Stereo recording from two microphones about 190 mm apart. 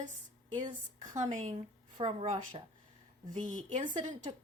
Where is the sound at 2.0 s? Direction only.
30° right (ahead or behind).